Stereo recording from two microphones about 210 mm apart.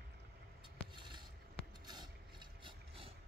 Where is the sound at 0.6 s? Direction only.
20° right (ahead or behind).